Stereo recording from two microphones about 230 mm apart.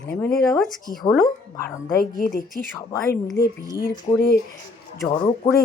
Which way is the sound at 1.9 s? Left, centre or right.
Left.